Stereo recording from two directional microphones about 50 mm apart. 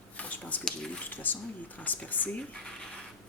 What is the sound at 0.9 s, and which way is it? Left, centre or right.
Chopping, left.